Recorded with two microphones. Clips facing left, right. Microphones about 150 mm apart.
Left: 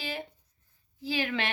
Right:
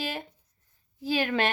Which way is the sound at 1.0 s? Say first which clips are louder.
Right 5 dB; 45° right (ahead or behind).